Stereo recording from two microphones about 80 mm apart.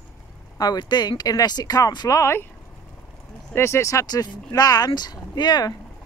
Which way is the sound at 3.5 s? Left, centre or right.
Left.